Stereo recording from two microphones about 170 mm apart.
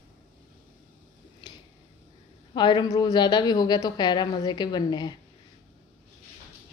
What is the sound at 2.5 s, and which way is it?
A woman's voice, 25° left (ahead or behind).